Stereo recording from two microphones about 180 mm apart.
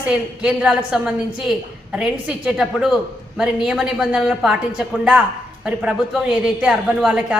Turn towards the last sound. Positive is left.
turn(degrees=-5)  # may be behind; listen again after turning